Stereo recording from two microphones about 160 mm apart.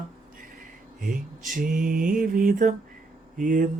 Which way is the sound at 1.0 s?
60° right (ahead or behind).